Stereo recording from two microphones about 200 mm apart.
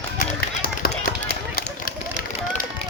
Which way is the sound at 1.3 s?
50° left (ahead or behind).